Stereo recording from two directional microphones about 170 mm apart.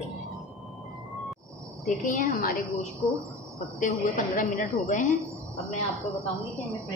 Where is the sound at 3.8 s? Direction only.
50° left (ahead or behind).